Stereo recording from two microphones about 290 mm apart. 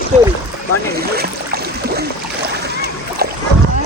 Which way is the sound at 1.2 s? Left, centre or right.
Right.